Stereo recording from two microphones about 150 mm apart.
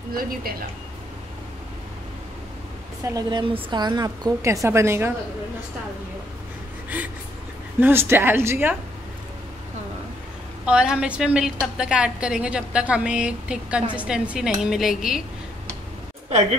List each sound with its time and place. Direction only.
0.1 s speech: 80° right
3.1 s a woman's voice: 30° right (ahead or behind)
7.8 s a woman's voice: 15° right (ahead or behind)
10.6 s a woman's voice: 5° right (ahead or behind)
16.3 s a woman's voice: 45° right (ahead or behind)